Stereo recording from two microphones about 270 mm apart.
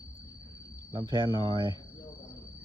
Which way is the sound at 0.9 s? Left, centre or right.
Centre.